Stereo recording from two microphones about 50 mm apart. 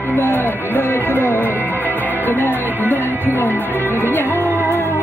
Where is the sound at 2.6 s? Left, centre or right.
Right.